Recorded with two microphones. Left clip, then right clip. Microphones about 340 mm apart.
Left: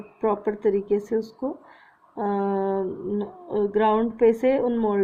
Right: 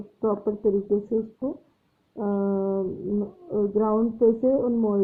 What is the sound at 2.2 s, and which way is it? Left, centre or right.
A woman's voice, left.